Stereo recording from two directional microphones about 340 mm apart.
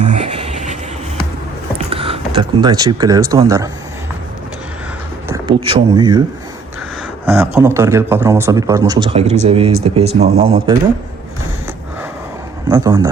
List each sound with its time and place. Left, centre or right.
0.0 s a sound: centre
1.9 s speech: centre
5.3 s speech: centre
7.3 s speech: centre
12.7 s speech: centre